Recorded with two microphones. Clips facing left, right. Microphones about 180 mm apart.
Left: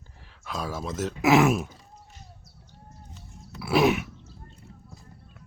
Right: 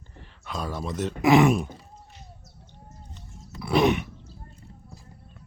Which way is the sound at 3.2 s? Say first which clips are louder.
Right 1 dB; 5° left (ahead or behind).